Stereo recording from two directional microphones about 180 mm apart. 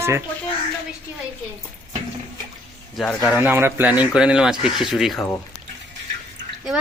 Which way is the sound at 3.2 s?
10° right (ahead or behind).